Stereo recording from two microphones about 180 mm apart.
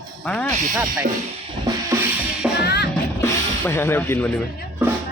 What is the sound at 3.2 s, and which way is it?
Music, 15° left (ahead or behind).